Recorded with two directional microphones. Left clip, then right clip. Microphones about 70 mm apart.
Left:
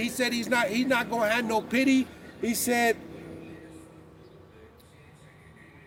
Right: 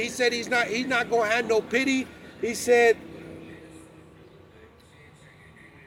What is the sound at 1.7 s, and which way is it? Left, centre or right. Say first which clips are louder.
Speech: even; left.